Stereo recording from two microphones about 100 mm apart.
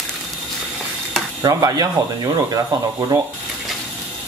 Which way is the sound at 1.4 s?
40° right (ahead or behind).